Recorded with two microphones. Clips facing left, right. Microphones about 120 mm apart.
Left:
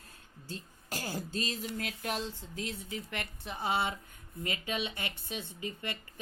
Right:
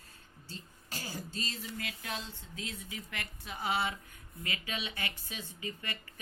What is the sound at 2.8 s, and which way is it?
Speech, 30° left (ahead or behind).